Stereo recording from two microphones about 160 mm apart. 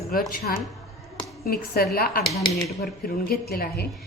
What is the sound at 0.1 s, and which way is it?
A woman's voice, 65° left (ahead or behind).